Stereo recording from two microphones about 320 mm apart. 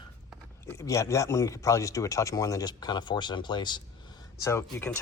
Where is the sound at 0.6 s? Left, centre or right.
Centre.